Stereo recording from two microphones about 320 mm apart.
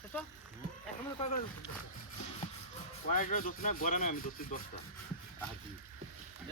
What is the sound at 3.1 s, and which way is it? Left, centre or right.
Speech, left.